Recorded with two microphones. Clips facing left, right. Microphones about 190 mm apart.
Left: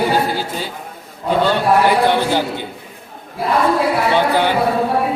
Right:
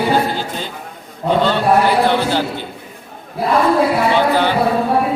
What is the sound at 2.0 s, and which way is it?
Speech, 15° left (ahead or behind).